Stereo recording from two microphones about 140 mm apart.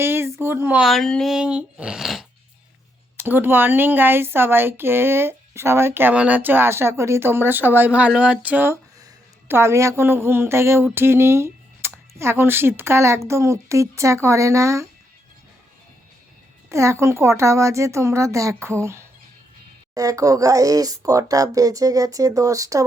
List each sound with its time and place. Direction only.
0.0 s speech: 15° right (ahead or behind)
0.8 s speech: centre (ahead or behind)
3.2 s speech: 15° right (ahead or behind)
16.6 s speech: 20° right (ahead or behind)